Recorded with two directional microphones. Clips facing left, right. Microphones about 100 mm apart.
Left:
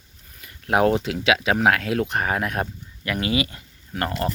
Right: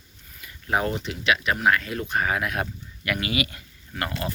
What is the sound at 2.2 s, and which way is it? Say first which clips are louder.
Speech: left 2 dB; 40° left (ahead or behind).